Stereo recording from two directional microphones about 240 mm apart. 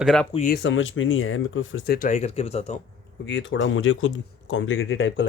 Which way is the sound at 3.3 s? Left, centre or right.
Left.